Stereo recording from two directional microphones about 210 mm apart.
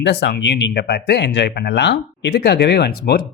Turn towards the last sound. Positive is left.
turn(degrees=50)  # may be behind; listen again after turning